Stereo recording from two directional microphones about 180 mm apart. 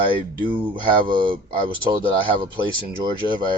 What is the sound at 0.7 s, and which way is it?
Speech, 25° right (ahead or behind).